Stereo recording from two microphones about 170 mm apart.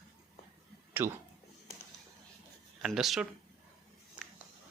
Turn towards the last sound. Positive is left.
turn(degrees=0)  # may be behind; listen again after turning